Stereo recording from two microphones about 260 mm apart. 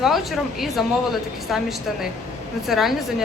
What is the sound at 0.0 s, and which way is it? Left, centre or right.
A woman's voice, centre.